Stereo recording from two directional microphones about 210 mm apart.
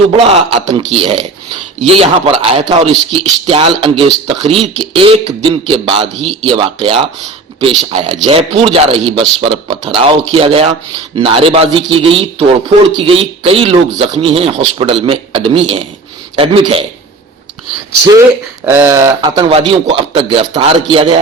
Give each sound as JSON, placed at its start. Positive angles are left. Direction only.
{"t": 0.3, "sound": "a man's voice", "side_deg": -25}
{"t": 18.0, "sound": "speech", "side_deg": -15}
{"t": 19.4, "sound": "a man's voice", "side_deg": -30}